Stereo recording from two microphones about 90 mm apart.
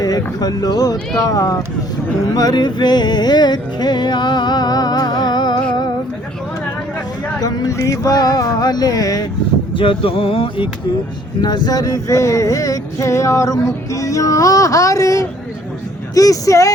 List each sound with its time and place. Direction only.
0.3 s speech: 50° left (ahead or behind)
2.2 s music: 45° left (ahead or behind)
7.4 s speech: 40° left (ahead or behind)
9.7 s speech: 70° left (ahead or behind)
11.4 s a sound: 50° left (ahead or behind)